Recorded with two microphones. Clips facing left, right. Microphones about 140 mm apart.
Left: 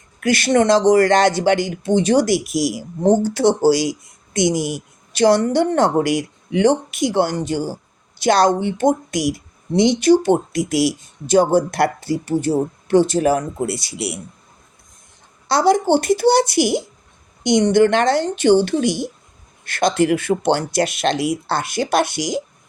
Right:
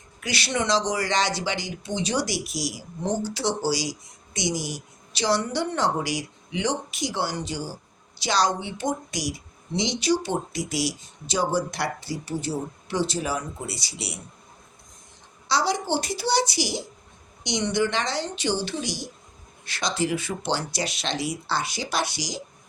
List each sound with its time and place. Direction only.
0.2 s speech: 50° left (ahead or behind)
15.4 s speech: 50° left (ahead or behind)